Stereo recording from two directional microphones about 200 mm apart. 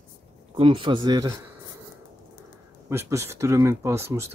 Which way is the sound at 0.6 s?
25° right (ahead or behind).